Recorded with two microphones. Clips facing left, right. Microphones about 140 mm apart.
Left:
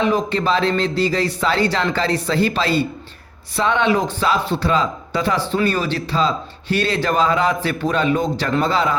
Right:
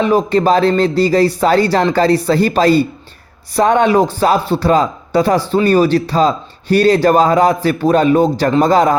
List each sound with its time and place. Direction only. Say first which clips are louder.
0.0 s speech: right 6 dB; 40° right (ahead or behind)